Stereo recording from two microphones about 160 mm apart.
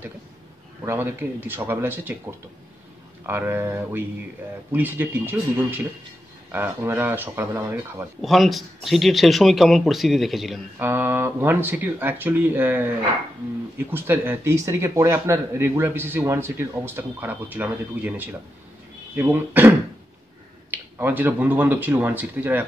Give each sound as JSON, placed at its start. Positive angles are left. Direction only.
{"t": 1.5, "sound": "speech", "side_deg": -15}
{"t": 3.3, "sound": "speech", "side_deg": -15}
{"t": 8.2, "sound": "speech", "side_deg": 0}
{"t": 10.8, "sound": "speech", "side_deg": -15}
{"t": 20.7, "sound": "speech", "side_deg": -10}